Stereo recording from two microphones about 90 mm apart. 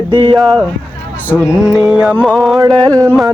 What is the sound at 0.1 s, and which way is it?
Speech, 70° right (ahead or behind).